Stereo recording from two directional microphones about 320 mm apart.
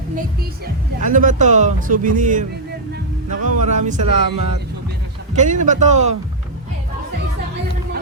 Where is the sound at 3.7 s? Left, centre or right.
Right.